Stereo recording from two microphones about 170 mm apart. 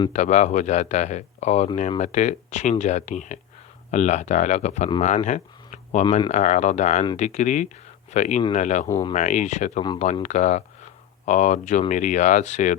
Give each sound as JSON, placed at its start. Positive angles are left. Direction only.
{"t": 0.1, "sound": "speech", "side_deg": 45}
{"t": 8.9, "sound": "speech", "side_deg": 20}
{"t": 9.1, "sound": "speech", "side_deg": 45}